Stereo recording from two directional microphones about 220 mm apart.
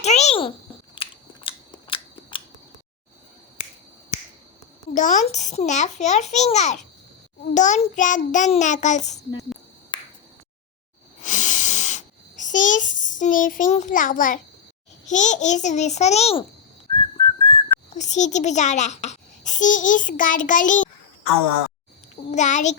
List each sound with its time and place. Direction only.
0.0 s a sound: 30° left (ahead or behind)
1.0 s scissors: 25° left (ahead or behind)
4.9 s a child's voice: 35° left (ahead or behind)
9.9 s finger snapping: 20° left (ahead or behind)
11.2 s a sound: 35° left (ahead or behind)
15.1 s a child's voice: 35° left (ahead or behind)
22.3 s a child's voice: 35° left (ahead or behind)